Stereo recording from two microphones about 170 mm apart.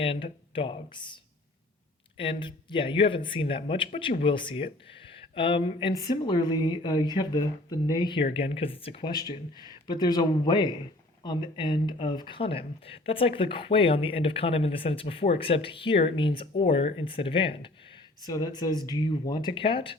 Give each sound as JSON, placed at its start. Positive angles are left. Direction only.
{"t": 0.0, "sound": "speech", "side_deg": 30}